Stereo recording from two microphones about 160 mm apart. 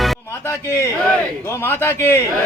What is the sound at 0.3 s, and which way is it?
A man's voice, 15° left (ahead or behind).